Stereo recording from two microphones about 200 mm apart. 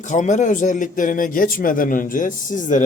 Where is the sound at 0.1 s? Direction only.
40° left (ahead or behind).